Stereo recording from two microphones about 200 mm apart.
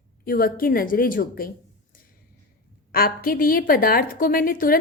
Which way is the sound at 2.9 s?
45° left (ahead or behind).